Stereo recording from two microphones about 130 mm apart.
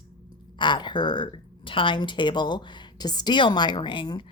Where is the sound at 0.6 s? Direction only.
35° left (ahead or behind).